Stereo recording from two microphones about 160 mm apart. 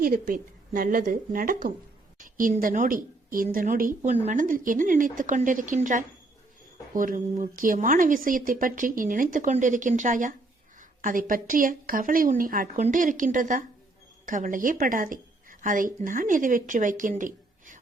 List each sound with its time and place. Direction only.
0.0 s a woman's voice: 55° right (ahead or behind)